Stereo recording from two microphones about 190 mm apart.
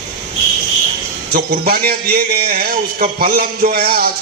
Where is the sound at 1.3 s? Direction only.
55° right (ahead or behind).